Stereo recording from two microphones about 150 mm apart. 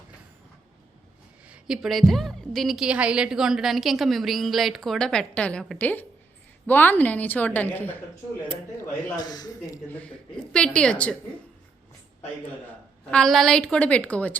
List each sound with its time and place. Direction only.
1.5 s a woman's voice: 5° right (ahead or behind); by 8.0 s 10° left (ahead or behind)
9.1 s a man's voice: 25° left (ahead or behind)
9.9 s a woman's voice: 5° left (ahead or behind)
12.6 s a woman's voice: 5° left (ahead or behind)